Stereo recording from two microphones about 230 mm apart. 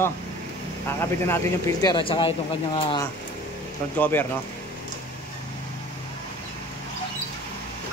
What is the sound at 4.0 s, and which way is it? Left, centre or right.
Speech, centre.